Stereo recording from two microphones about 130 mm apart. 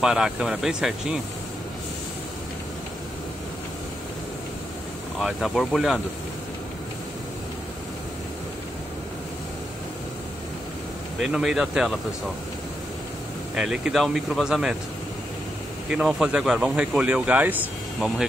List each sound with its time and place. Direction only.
0.0 s speech: 5° right (ahead or behind)
5.2 s speech: centre (ahead or behind)
11.1 s speech: 5° right (ahead or behind)
13.6 s speech: 5° right (ahead or behind)
15.9 s speech: 5° right (ahead or behind)